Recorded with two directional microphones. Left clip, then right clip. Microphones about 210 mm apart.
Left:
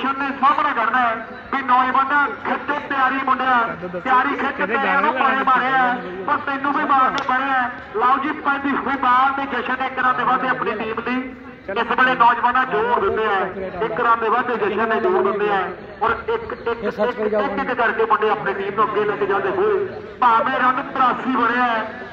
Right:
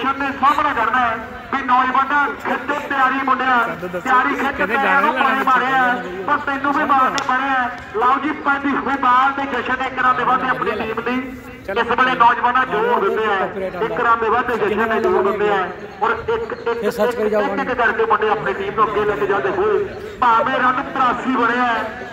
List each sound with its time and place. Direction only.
0.0 s a man's voice: 20° left (ahead or behind)
17.0 s speech: 40° right (ahead or behind)
17.4 s a man's voice: 20° left (ahead or behind)